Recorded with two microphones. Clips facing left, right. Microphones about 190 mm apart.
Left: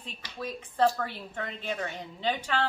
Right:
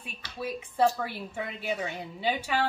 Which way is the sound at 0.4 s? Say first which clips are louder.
Right 1 dB; 10° right (ahead or behind).